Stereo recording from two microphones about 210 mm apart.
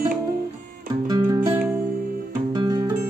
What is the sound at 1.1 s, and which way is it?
Music, 20° right (ahead or behind).